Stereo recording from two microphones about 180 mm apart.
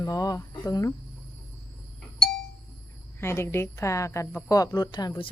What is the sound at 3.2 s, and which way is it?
A woman's voice, 15° left (ahead or behind).